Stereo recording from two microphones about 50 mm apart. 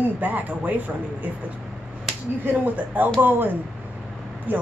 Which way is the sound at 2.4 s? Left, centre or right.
Right.